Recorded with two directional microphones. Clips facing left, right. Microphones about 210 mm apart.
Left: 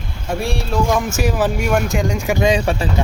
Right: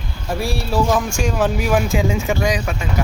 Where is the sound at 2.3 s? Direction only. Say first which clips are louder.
Left 4 dB; 25° left (ahead or behind).